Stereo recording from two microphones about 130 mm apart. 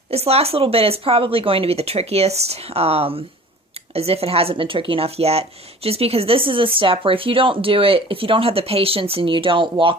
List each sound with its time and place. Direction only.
0.1 s speech: 50° right (ahead or behind)